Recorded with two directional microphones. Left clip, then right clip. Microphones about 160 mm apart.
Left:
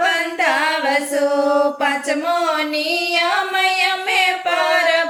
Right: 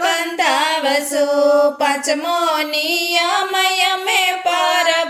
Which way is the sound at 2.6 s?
45° right (ahead or behind).